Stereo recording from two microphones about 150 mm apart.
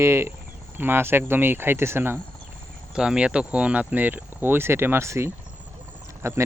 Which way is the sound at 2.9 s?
5° right (ahead or behind).